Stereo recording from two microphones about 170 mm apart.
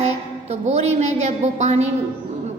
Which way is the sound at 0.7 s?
40° right (ahead or behind).